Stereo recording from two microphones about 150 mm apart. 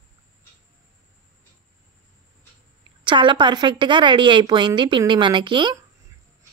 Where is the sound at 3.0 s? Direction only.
30° right (ahead or behind).